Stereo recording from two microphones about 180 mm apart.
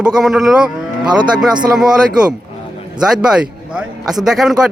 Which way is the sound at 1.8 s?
5° right (ahead or behind).